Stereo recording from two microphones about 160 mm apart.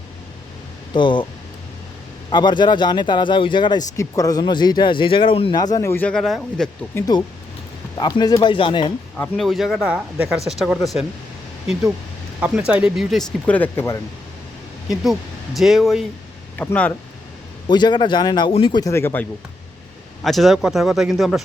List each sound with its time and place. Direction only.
0.9 s speech: 30° left (ahead or behind)
2.3 s speech: 30° left (ahead or behind); by 6.7 s centre (ahead or behind)
6.9 s speech: 20° left (ahead or behind)
9.1 s speech: 10° left (ahead or behind)
12.4 s speech: 10° right (ahead or behind)
13.5 s speech: 10° left (ahead or behind)
15.5 s speech: centre (ahead or behind)
16.6 s speech: 10° left (ahead or behind)
17.7 s speech: 30° left (ahead or behind)
20.2 s speech: centre (ahead or behind)